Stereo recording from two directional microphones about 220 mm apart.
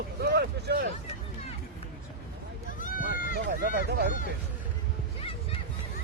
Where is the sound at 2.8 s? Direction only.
40° left (ahead or behind).